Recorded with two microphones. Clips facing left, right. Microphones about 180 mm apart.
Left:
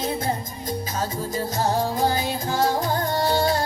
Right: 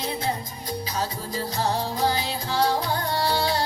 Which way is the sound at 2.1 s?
45° left (ahead or behind).